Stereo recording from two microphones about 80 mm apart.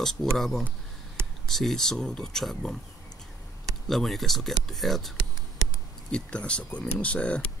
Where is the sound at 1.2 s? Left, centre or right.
Right.